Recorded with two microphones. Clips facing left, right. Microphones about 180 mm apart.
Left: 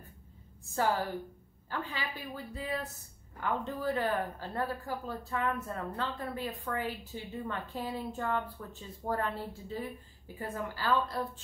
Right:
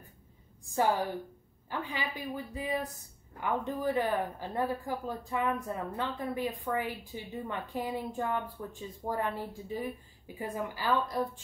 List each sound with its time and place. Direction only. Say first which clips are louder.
0.7 s a woman's voice: right 2 dB; 15° right (ahead or behind)